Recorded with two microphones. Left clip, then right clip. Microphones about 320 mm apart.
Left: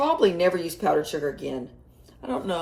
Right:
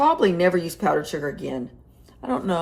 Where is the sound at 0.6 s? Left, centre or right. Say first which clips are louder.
Right 1 dB; right.